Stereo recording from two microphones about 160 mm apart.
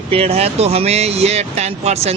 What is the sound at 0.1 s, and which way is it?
Speech, 40° right (ahead or behind).